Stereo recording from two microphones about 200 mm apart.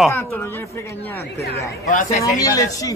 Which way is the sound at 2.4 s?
15° left (ahead or behind).